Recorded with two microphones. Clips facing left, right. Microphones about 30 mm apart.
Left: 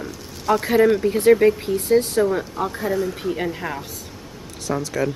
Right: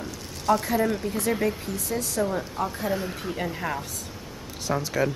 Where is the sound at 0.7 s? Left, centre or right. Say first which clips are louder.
Left 9 dB; left.